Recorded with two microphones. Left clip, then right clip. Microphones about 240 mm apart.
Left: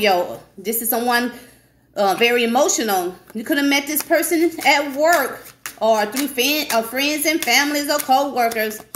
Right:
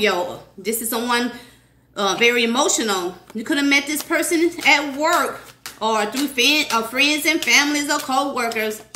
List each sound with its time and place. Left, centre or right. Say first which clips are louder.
0.0 s a woman's voice: left 2 dB; centre